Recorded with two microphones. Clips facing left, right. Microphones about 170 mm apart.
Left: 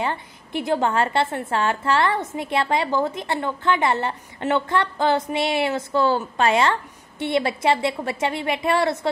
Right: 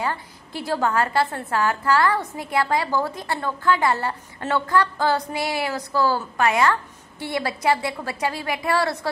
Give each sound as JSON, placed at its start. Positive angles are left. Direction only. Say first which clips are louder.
{"t": 0.0, "sound": "a woman's voice", "louder": "left 1 dB", "side_deg": 20}